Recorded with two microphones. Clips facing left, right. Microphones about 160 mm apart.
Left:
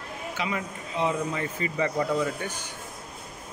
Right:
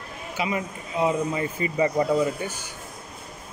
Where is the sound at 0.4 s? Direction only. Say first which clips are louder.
Right 4 dB; 10° right (ahead or behind).